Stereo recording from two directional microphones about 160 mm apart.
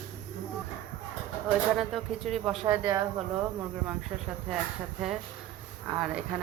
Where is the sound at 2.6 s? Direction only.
20° right (ahead or behind).